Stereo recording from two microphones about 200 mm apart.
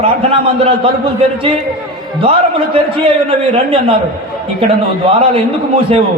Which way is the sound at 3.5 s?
25° right (ahead or behind).